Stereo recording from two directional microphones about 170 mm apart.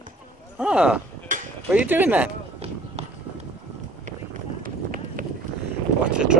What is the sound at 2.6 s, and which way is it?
Run, 35° right (ahead or behind).